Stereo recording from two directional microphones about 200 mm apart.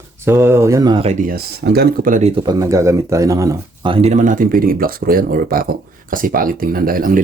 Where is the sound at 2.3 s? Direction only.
20° right (ahead or behind).